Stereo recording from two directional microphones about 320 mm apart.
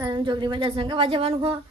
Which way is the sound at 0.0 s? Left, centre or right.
Centre.